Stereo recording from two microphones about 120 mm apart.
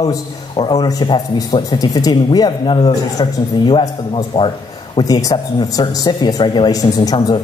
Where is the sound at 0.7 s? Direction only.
35° left (ahead or behind).